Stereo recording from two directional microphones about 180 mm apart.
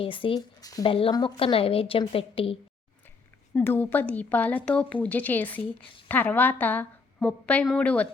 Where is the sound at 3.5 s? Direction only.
10° left (ahead or behind).